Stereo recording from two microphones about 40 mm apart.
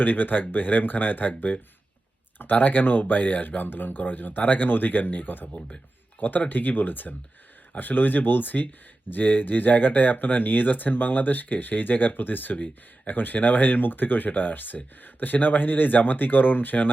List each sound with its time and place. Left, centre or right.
0.0 s speech: left
2.4 s speech: left